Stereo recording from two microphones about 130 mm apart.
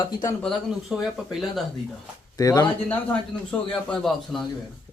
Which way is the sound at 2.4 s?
25° left (ahead or behind).